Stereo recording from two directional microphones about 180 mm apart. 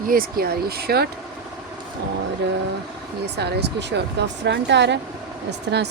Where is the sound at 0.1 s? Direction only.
55° right (ahead or behind).